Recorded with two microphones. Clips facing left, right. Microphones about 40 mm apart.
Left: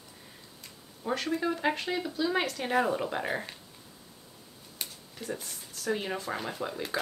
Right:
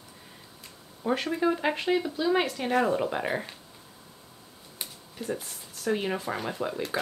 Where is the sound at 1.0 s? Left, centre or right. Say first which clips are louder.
Right 4 dB; centre.